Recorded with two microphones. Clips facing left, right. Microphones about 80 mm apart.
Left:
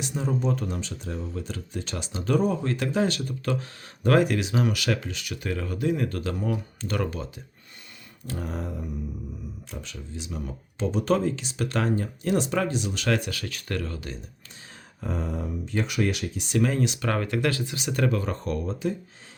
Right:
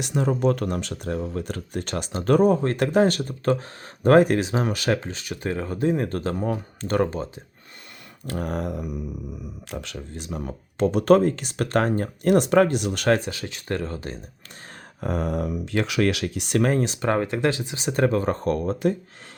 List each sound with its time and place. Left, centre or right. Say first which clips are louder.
0.0 s speech: right 5 dB; right
8.3 s speech: right 5 dB; right
13.1 s speech: right 6 dB; right
15.0 s speech: right 6 dB; right